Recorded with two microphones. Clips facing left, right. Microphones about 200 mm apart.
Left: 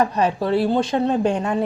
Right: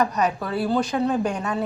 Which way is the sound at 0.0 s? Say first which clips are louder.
Left 3 dB; 30° left (ahead or behind).